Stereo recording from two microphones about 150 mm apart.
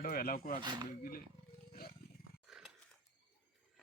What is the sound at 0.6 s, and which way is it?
Speech, 30° right (ahead or behind).